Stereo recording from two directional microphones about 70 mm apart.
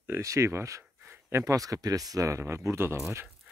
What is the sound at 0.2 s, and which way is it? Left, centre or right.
Speech, right.